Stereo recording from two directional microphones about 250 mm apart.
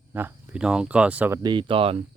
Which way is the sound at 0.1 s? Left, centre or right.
Centre.